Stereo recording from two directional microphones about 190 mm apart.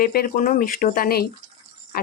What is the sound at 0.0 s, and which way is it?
Speech, 50° left (ahead or behind).